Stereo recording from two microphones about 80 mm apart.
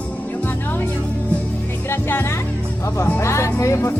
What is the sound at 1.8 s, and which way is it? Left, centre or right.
Music, left.